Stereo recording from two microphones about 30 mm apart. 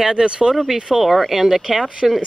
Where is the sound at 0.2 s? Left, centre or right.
Right.